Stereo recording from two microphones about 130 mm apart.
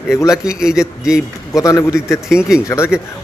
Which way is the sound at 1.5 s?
25° left (ahead or behind).